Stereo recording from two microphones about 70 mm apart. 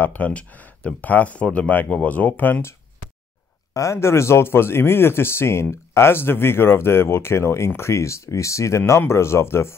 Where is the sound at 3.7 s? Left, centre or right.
Left.